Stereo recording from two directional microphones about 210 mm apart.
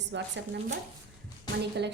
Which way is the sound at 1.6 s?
55° right (ahead or behind).